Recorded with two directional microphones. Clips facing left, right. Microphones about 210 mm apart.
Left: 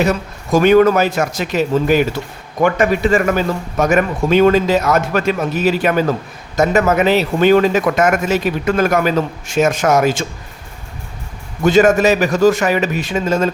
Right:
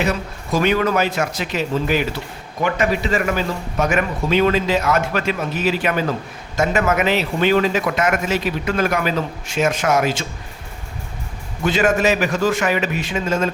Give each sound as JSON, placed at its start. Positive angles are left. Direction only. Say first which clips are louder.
{"t": 0.5, "sound": "a man's voice", "louder": "left 7 dB", "side_deg": 45}
{"t": 11.6, "sound": "a man's voice", "louder": "left 6 dB", "side_deg": 45}